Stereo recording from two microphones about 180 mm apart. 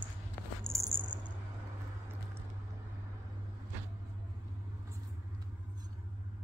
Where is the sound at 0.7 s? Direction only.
25° right (ahead or behind).